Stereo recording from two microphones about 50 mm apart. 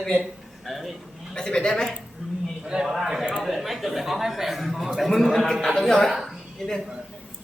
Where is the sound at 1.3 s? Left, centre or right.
Centre.